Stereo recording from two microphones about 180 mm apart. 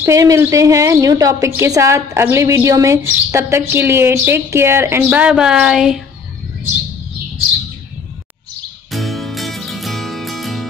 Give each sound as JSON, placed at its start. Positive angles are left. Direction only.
{"t": 0.0, "sound": "a woman's voice", "side_deg": -15}
{"t": 8.9, "sound": "music", "side_deg": 0}